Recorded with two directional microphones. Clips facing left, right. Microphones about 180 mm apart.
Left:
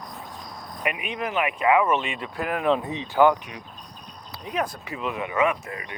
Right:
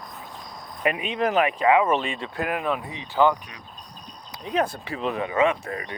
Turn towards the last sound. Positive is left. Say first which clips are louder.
# right 2 dB
turn(degrees=-35)  # may be behind; listen again after turning